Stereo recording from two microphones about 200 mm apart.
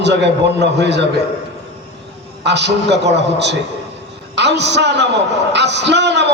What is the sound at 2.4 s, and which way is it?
A man's voice, 60° right (ahead or behind).